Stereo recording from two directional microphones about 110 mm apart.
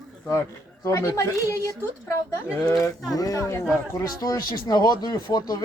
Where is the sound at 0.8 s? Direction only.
25° left (ahead or behind).